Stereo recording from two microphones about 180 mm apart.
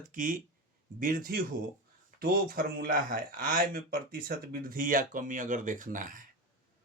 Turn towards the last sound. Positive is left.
turn(degrees=-50)  # may be behind; listen again after turning